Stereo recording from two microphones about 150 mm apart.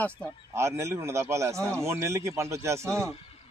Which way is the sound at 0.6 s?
20° right (ahead or behind).